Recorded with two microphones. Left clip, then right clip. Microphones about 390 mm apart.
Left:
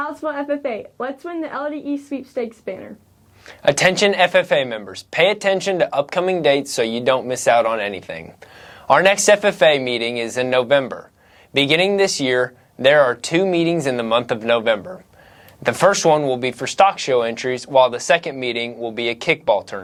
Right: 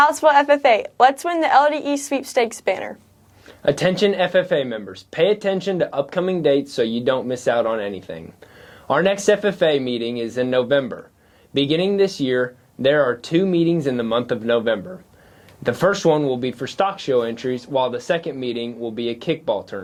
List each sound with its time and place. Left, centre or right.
0.0 s a woman's voice: right
3.6 s speech: left